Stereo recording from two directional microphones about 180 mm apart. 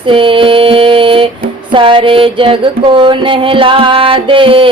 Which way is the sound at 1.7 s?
30° right (ahead or behind).